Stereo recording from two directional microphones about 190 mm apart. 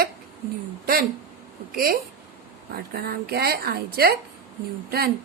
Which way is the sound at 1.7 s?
50° right (ahead or behind).